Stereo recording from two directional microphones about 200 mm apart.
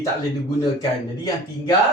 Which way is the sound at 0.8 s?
20° left (ahead or behind).